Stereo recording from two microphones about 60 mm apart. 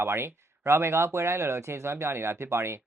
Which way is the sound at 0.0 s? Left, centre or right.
Right.